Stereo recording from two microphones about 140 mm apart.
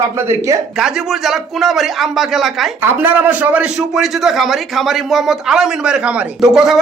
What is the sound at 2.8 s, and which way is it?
A man's voice, 15° right (ahead or behind).